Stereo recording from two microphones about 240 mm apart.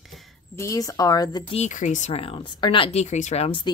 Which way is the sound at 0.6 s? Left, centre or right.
Centre.